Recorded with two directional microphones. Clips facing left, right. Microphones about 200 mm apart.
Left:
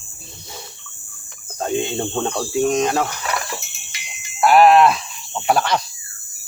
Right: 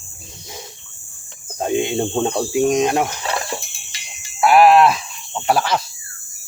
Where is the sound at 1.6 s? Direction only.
15° right (ahead or behind); by 4.3 s 30° right (ahead or behind).